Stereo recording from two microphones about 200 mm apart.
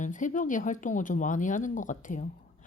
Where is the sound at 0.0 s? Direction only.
40° left (ahead or behind).